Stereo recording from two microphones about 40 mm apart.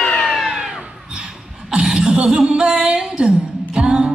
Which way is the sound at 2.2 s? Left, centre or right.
Centre.